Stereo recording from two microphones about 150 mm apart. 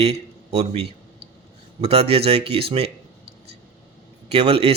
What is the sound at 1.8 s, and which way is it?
Speech, 45° right (ahead or behind).